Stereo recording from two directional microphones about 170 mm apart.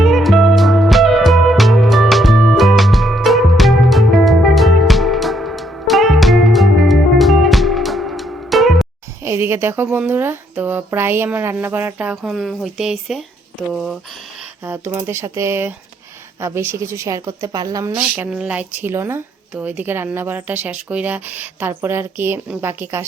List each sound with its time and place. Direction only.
0.0 s music: centre (ahead or behind)
9.2 s speech: 15° right (ahead or behind)
14.6 s speech: 10° right (ahead or behind)
17.9 s speech: 5° right (ahead or behind)